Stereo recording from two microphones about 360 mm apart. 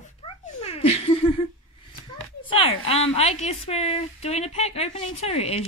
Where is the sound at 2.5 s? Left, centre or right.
Centre.